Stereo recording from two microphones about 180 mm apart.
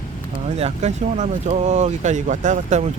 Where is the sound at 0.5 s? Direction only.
35° right (ahead or behind).